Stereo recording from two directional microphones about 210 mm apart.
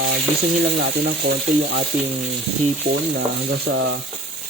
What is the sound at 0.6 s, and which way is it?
Frying, 55° right (ahead or behind).